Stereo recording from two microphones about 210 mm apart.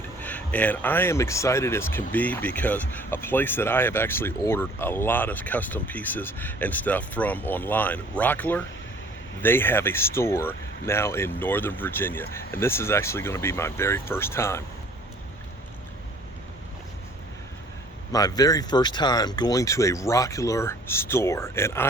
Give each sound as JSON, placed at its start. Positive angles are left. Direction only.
{"t": 0.2, "sound": "speech", "side_deg": 5}
{"t": 18.1, "sound": "speech", "side_deg": 15}